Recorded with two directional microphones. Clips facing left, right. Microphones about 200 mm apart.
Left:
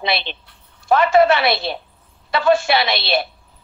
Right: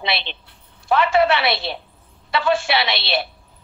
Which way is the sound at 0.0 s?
45° left (ahead or behind).